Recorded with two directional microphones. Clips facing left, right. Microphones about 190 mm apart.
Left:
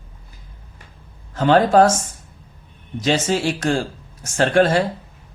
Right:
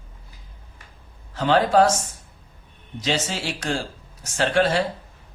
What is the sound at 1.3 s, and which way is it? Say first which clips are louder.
Speech: left 4 dB; 50° left (ahead or behind).